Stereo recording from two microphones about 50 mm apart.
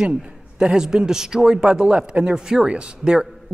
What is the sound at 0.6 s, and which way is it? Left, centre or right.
Speech, centre.